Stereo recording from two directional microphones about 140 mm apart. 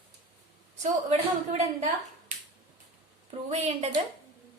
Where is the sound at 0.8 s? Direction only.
50° right (ahead or behind).